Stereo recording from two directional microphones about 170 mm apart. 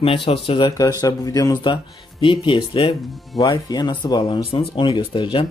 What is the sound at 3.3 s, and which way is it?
Speech, 20° left (ahead or behind).